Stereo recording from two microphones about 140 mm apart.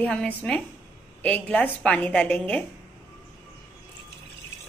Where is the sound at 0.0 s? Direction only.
10° left (ahead or behind).